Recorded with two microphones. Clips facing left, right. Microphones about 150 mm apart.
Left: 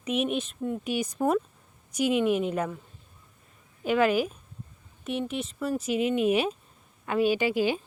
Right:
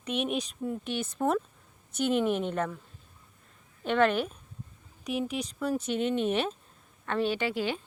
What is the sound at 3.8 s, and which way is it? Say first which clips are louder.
A woman's voice: left 2 dB; 5° left (ahead or behind).